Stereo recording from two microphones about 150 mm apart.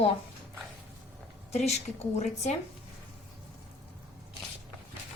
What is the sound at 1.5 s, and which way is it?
Speech, 45° left (ahead or behind).